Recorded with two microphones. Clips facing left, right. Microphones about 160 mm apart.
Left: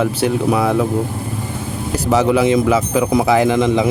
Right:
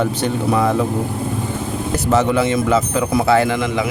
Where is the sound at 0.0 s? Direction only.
5° left (ahead or behind).